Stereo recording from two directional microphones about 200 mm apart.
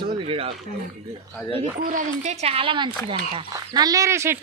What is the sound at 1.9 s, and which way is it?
Speech, 40° right (ahead or behind).